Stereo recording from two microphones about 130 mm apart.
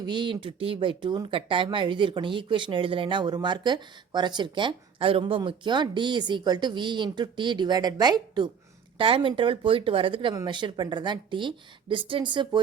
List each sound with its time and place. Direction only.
0.0 s speech: 35° right (ahead or behind)
9.0 s speech: 45° right (ahead or behind)